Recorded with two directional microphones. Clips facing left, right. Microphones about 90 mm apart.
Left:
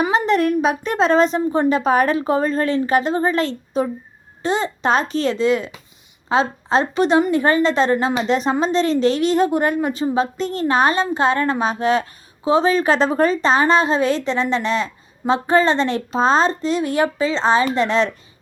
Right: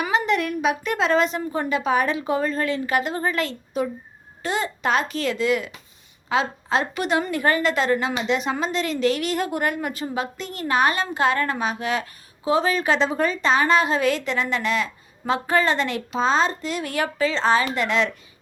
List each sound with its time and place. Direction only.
0.0 s a woman's voice: 35° left (ahead or behind)